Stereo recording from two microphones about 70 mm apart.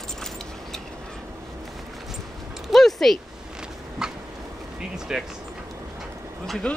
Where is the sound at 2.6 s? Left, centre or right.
Centre.